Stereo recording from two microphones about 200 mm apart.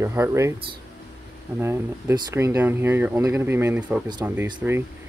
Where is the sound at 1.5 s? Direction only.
10° right (ahead or behind).